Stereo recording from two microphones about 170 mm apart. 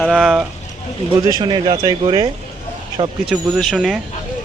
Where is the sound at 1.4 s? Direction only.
25° right (ahead or behind).